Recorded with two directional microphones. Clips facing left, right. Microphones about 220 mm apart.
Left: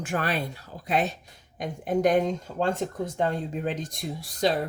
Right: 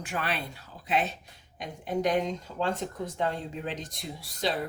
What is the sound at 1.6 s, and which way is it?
Speech, 45° left (ahead or behind).